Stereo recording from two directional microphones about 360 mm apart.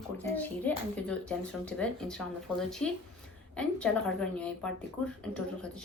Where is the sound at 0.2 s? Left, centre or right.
Centre.